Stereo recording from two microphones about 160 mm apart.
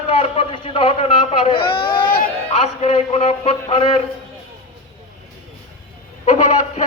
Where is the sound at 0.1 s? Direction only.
35° left (ahead or behind).